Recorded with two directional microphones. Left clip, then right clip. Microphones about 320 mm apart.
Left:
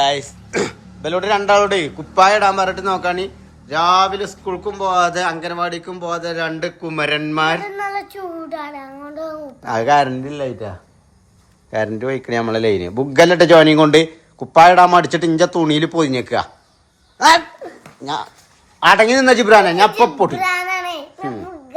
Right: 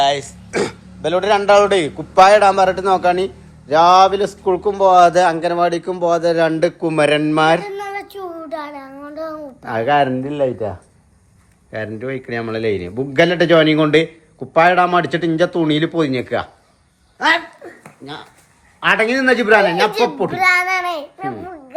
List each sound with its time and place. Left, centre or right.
0.0 s a man's voice: centre
11.7 s a man's voice: centre
18.8 s a man's voice: centre
20.3 s a sound: centre